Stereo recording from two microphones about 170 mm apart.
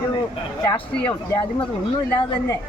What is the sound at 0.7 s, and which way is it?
Speech, 15° left (ahead or behind).